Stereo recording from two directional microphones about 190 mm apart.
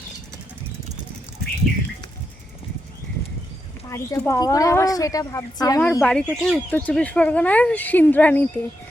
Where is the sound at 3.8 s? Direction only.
15° left (ahead or behind).